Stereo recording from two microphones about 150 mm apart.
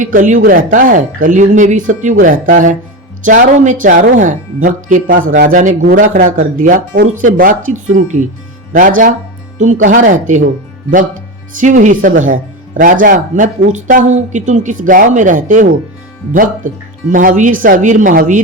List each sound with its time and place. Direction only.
0.0 s speech: 60° right (ahead or behind)